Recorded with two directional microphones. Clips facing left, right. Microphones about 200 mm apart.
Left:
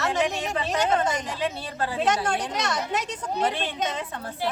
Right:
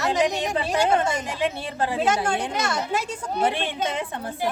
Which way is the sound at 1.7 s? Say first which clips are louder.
Right 3 dB; 20° right (ahead or behind).